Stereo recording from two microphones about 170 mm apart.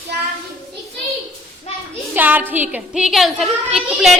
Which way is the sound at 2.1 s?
10° right (ahead or behind).